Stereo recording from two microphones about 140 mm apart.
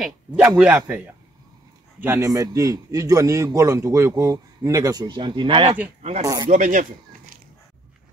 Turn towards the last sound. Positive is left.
turn(degrees=-65)  # may be behind; listen again after turning